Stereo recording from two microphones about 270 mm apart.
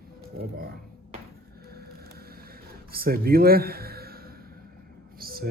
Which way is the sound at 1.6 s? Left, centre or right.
Right.